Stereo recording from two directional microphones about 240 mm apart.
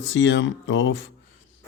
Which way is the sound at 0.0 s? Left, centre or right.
Left.